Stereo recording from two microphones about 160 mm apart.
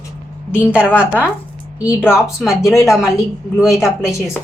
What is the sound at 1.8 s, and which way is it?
A woman's voice, 15° left (ahead or behind).